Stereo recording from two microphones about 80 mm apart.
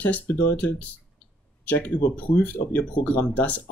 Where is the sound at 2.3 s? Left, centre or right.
Centre.